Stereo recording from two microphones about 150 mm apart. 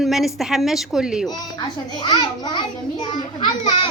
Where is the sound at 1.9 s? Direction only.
30° left (ahead or behind).